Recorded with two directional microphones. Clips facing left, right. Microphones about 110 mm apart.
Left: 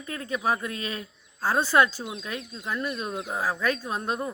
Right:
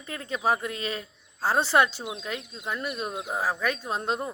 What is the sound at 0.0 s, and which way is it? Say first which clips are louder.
Speech: even; 30° right (ahead or behind).